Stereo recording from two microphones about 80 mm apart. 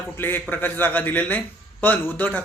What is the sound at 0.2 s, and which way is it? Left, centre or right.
Speech, left.